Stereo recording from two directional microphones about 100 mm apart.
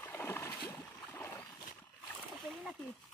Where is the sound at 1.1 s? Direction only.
20° left (ahead or behind).